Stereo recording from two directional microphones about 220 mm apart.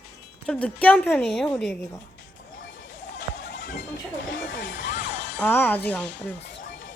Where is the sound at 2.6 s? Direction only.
60° left (ahead or behind).